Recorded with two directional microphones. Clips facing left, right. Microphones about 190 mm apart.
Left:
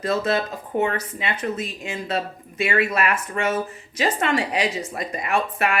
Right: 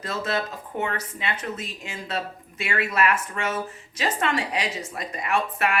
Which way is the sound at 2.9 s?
30° left (ahead or behind).